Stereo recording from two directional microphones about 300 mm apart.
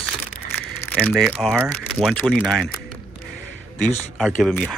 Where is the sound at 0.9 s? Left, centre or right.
Centre.